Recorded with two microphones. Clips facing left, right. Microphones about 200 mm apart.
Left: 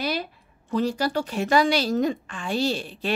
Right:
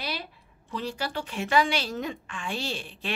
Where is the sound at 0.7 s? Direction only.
45° left (ahead or behind).